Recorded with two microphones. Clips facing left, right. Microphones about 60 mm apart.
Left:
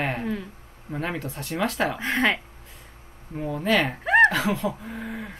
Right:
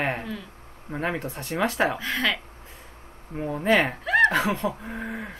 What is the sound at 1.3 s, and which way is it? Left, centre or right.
Speech, centre.